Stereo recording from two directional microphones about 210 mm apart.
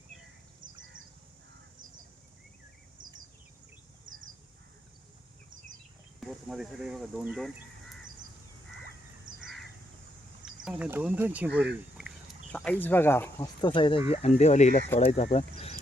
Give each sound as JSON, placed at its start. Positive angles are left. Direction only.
{"t": 6.1, "sound": "speech", "side_deg": 0}
{"t": 10.4, "sound": "speech", "side_deg": -5}
{"t": 12.5, "sound": "chicken", "side_deg": 5}
{"t": 12.8, "sound": "speech", "side_deg": 10}